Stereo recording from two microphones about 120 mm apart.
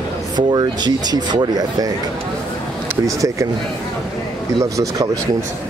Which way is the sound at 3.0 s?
25° right (ahead or behind).